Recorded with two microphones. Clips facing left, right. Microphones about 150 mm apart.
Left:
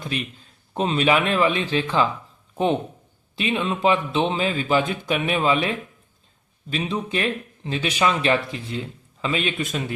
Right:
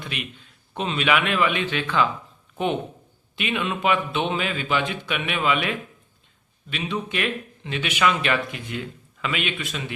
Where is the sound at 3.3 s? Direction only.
30° left (ahead or behind).